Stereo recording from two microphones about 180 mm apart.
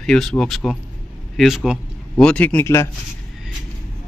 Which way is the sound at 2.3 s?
5° left (ahead or behind).